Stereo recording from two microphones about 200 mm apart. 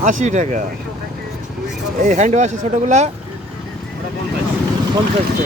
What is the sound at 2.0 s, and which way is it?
A man's voice, 35° right (ahead or behind).